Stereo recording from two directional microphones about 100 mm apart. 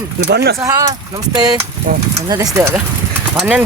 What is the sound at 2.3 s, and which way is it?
Speech, 30° right (ahead or behind).